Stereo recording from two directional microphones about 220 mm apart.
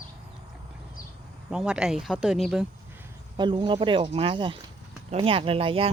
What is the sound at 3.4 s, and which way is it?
Speech, 20° right (ahead or behind).